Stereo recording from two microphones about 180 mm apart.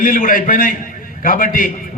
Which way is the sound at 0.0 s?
50° left (ahead or behind).